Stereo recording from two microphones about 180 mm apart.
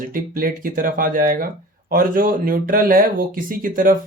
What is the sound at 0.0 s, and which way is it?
Speech, 50° right (ahead or behind).